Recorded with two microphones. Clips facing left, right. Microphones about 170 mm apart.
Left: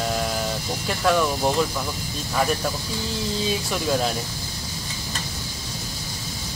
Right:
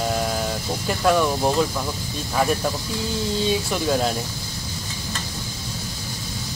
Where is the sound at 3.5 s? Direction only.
Centre (ahead or behind).